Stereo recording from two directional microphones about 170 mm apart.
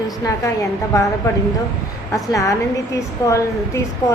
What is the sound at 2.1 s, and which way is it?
A woman's voice, 20° left (ahead or behind).